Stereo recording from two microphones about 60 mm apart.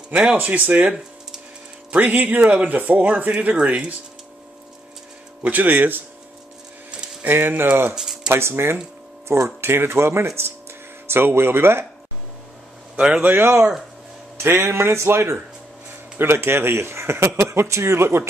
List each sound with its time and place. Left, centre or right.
0.1 s speech: centre
0.4 s speech: right
1.9 s speech: right
5.4 s speech: right
7.2 s speech: right
7.9 s a sound: centre
8.3 s speech: right
12.9 s a man's voice: centre
13.2 s speech: right
14.3 s speech: right